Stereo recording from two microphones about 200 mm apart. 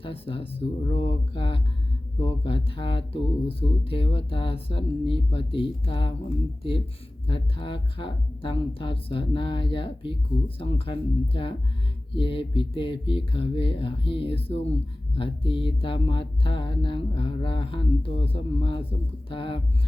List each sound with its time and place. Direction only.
0.0 s speech: 25° left (ahead or behind)